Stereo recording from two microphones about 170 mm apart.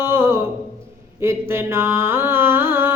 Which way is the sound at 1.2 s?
15° right (ahead or behind).